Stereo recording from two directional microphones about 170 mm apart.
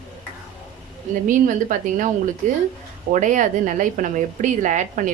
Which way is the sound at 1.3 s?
50° right (ahead or behind).